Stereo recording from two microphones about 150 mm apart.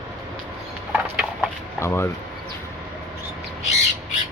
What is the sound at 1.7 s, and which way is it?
Speech, 15° left (ahead or behind).